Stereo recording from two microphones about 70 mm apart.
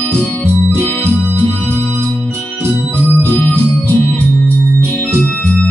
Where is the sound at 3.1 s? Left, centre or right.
Left.